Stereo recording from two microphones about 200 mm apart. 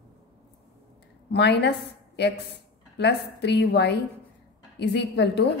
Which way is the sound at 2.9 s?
55° left (ahead or behind).